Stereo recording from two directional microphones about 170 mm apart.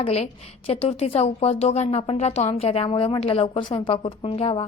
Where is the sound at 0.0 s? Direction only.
35° left (ahead or behind).